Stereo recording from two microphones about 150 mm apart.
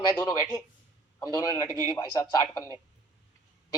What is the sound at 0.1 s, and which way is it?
A woman's voice, 25° left (ahead or behind).